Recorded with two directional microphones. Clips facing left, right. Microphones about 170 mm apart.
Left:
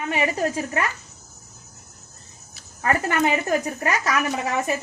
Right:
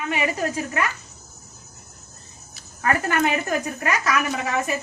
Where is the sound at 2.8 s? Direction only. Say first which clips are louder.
Even; 25° left (ahead or behind).